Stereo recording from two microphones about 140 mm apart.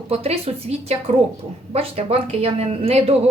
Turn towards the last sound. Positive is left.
turn(degrees=-45)  # may be behind; listen again after turning